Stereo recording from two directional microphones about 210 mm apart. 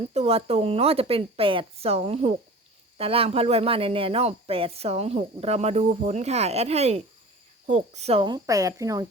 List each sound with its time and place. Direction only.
0.1 s speech: 30° right (ahead or behind)